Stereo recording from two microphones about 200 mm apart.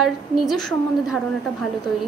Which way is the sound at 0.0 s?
Centre (ahead or behind).